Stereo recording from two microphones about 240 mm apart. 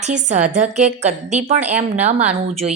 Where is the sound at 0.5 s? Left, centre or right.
Right.